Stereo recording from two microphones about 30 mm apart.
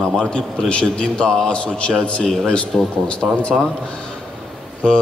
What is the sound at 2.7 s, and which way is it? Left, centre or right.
Speech, centre.